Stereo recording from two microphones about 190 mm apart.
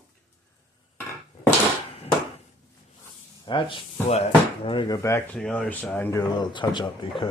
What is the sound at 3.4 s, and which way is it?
Speech, 25° left (ahead or behind).